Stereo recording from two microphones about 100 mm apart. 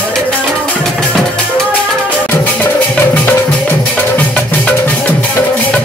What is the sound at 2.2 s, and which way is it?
Music, 15° left (ahead or behind).